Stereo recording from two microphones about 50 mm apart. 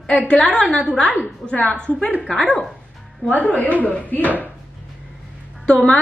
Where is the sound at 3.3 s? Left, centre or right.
Left.